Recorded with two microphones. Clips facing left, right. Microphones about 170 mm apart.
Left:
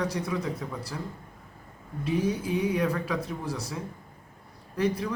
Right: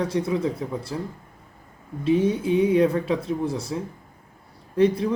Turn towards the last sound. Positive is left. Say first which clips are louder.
# right 8 dB
turn(degrees=-25)  # may be behind; listen again after turning